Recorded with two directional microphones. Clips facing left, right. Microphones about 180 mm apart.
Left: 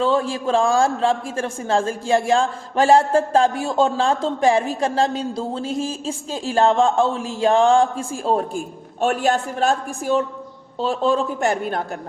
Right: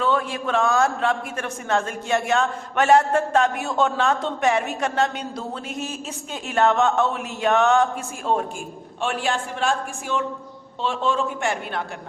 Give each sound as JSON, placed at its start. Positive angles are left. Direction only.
{"t": 0.0, "sound": "a man's voice", "side_deg": 30}